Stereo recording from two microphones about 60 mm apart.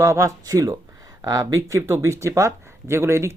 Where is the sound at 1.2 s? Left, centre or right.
Right.